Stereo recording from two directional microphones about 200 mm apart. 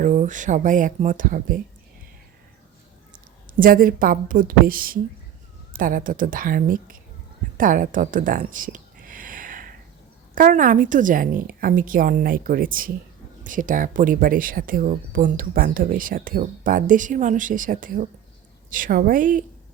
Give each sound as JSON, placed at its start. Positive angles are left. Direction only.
{"t": 0.0, "sound": "speech", "side_deg": -40}
{"t": 3.6, "sound": "speech", "side_deg": -45}
{"t": 7.5, "sound": "a sound", "side_deg": -40}
{"t": 10.3, "sound": "speech", "side_deg": -45}